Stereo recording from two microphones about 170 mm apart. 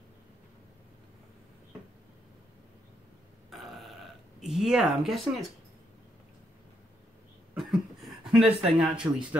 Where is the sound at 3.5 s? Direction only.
Centre (ahead or behind).